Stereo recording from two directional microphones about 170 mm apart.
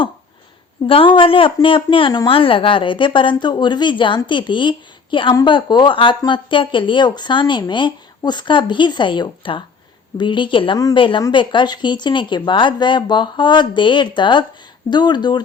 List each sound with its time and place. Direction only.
0.9 s a woman's voice: 30° left (ahead or behind)